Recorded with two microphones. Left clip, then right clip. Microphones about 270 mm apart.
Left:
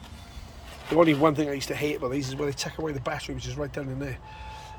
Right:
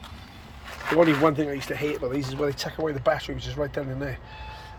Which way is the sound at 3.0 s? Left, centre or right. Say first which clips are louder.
Right 7 dB; centre.